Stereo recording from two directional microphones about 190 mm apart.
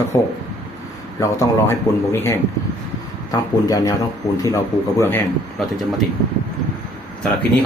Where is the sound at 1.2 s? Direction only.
15° left (ahead or behind).